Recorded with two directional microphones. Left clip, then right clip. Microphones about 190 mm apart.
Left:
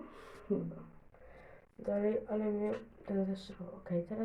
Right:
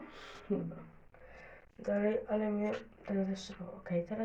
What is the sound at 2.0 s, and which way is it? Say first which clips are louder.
Speech: right 1 dB; centre (ahead or behind).